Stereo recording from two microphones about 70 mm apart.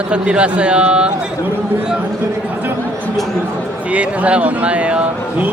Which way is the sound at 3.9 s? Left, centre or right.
Centre.